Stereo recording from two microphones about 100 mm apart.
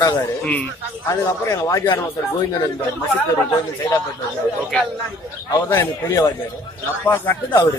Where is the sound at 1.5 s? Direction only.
35° left (ahead or behind).